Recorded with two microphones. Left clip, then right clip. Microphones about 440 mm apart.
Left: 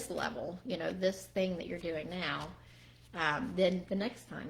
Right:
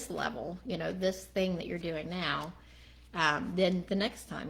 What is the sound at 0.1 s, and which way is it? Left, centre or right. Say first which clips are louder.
A woman's voice: right 2 dB; centre.